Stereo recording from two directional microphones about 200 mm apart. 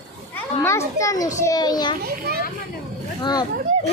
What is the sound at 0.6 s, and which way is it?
A child's voice, 15° left (ahead or behind).